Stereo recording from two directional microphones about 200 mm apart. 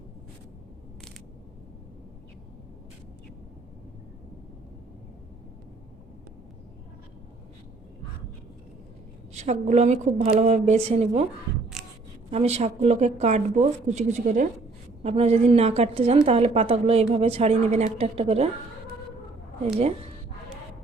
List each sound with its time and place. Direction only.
9.3 s a woman's voice: 35° right (ahead or behind)
11.8 s a sound: centre (ahead or behind)
12.3 s a woman's voice: 30° right (ahead or behind)